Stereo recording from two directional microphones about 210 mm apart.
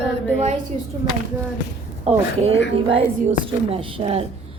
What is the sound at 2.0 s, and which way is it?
A woman's voice, 25° right (ahead or behind).